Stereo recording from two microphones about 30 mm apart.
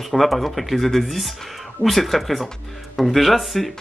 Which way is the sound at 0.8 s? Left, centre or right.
Centre.